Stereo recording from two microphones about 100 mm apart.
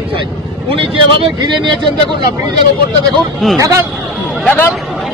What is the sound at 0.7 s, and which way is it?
Speech, 60° right (ahead or behind).